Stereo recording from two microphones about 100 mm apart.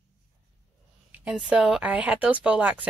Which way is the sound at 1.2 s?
10° right (ahead or behind).